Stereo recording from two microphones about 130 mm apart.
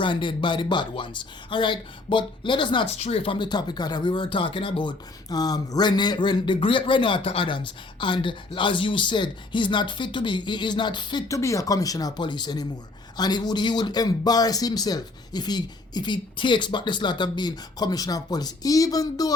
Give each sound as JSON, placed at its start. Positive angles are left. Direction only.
{"t": 0.0, "sound": "speech", "side_deg": 40}
{"t": 2.8, "sound": "speech", "side_deg": 55}
{"t": 11.3, "sound": "speech", "side_deg": 25}